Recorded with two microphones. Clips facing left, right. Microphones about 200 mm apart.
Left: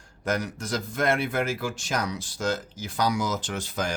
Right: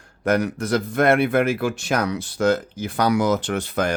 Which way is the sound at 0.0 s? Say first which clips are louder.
Right 8 dB; 60° right (ahead or behind).